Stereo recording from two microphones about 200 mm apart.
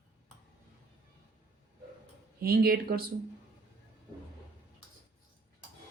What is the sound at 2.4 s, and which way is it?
Speech, 50° right (ahead or behind).